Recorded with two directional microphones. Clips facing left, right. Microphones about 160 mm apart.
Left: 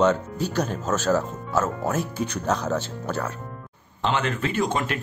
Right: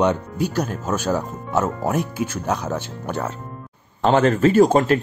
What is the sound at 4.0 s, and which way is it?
Speech, 40° right (ahead or behind).